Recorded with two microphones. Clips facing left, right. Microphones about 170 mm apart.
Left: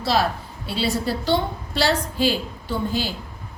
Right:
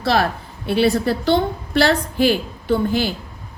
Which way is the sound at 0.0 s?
60° right (ahead or behind).